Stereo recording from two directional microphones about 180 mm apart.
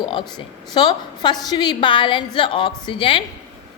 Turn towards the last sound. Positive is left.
turn(degrees=25)  # may be behind; listen again after turning